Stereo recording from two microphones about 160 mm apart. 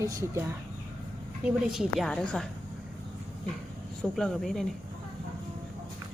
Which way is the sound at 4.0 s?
5° left (ahead or behind).